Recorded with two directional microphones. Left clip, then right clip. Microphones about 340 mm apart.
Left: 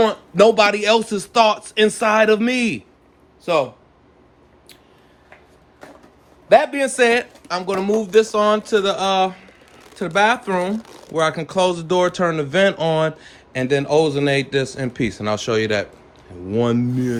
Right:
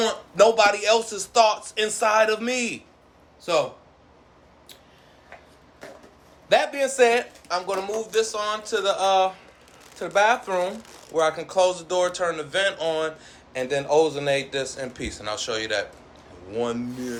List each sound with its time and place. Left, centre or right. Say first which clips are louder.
0.0 s a man's voice: left 5 dB; centre
6.5 s speech: left 6 dB; centre